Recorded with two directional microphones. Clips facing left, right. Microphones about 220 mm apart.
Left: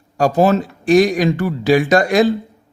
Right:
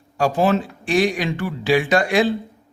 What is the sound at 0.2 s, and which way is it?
Speech, 40° left (ahead or behind).